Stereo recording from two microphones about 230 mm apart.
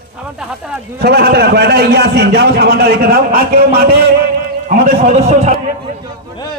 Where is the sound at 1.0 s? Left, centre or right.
Right.